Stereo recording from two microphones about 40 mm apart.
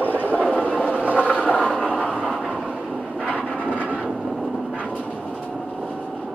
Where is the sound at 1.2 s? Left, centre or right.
Left.